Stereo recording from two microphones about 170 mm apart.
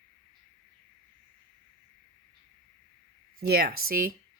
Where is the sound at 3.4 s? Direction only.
65° right (ahead or behind).